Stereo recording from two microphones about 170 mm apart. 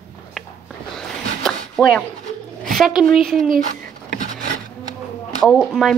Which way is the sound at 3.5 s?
55° right (ahead or behind).